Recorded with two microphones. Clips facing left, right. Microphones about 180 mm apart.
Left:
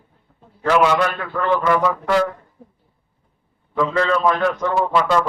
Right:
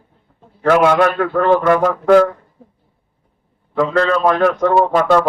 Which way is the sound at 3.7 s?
55° right (ahead or behind).